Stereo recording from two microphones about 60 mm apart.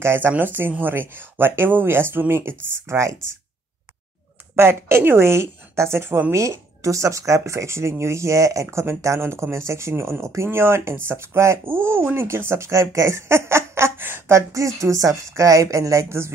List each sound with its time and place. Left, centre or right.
0.0 s speech: right
0.3 s speech: right
2.9 s speech: right
4.6 s speech: right
6.3 s speech: right
11.6 s speech: right
14.2 s speech: right